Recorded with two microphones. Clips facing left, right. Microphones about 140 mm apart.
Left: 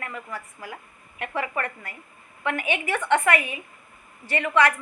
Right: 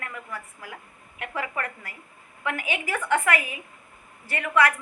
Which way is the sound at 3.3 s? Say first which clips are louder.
Left 2 dB; 70° left (ahead or behind).